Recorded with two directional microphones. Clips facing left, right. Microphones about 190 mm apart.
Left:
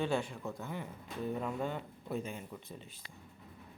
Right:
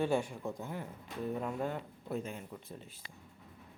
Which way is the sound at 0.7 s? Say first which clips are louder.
Even; 5° right (ahead or behind).